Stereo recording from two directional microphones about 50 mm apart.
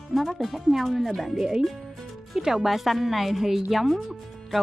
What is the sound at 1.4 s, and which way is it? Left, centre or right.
Speech, centre.